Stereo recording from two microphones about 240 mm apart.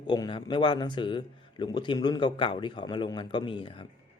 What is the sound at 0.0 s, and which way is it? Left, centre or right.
Speech, centre.